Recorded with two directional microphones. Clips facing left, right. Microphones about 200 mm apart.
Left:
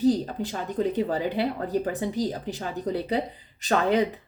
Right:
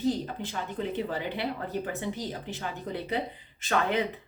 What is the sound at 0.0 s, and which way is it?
Speech, 35° left (ahead or behind).